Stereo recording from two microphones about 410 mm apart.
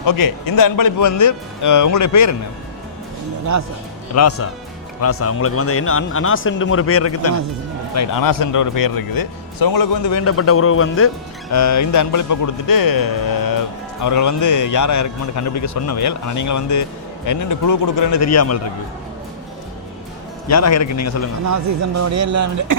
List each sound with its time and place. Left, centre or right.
0.0 s speech: left
4.1 s speech: left
7.9 s speech: left
11.5 s speech: left
20.5 s speech: left
21.4 s speech: right